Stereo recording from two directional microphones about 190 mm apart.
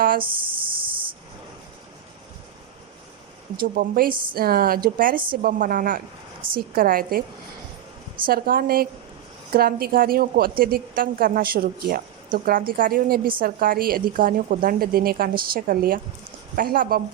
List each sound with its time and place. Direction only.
0.2 s a sound: 25° right (ahead or behind)
3.6 s a woman's voice: 50° right (ahead or behind)
4.1 s a woman's voice: 25° right (ahead or behind)
4.4 s a woman's voice: 50° right (ahead or behind)
6.4 s a woman's voice: 25° right (ahead or behind)
6.7 s a woman's voice: 50° right (ahead or behind)
8.3 s a woman's voice: 50° right (ahead or behind)